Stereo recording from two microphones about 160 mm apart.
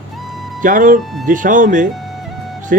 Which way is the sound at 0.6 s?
60° right (ahead or behind).